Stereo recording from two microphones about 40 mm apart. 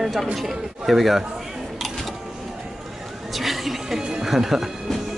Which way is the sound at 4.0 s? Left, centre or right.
Centre.